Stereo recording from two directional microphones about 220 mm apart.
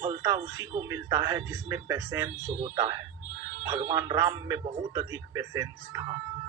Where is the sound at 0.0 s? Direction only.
20° right (ahead or behind).